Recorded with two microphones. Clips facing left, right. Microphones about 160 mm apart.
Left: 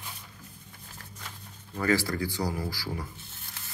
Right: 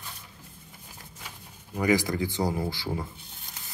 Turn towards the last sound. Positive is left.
turn(degrees=-20)  # may be behind; listen again after turning